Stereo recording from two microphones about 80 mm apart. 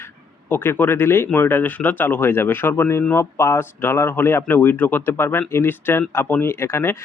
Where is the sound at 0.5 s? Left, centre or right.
Left.